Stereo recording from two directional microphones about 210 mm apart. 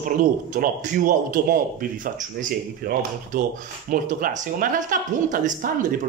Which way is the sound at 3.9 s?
40° right (ahead or behind).